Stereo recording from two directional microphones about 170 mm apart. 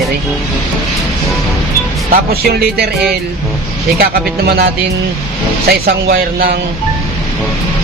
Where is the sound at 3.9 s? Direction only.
65° right (ahead or behind).